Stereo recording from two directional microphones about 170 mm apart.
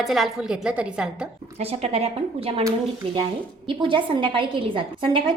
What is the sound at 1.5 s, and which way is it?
A woman's voice, 35° right (ahead or behind).